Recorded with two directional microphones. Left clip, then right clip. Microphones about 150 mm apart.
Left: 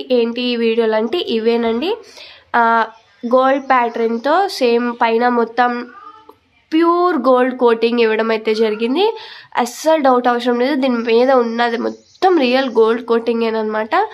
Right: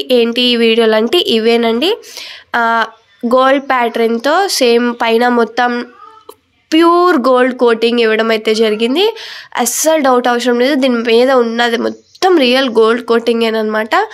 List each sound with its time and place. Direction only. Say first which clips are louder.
0.0 s speech: right 5 dB; 30° right (ahead or behind)